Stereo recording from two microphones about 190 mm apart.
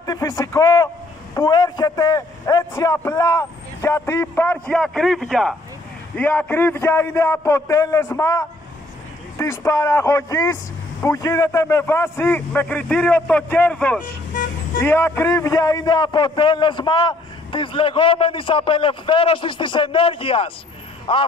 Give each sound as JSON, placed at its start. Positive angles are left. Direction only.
{"t": 0.0, "sound": "a man's voice", "side_deg": 20}